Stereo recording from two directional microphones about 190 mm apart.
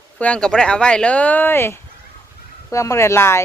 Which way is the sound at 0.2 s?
5° left (ahead or behind).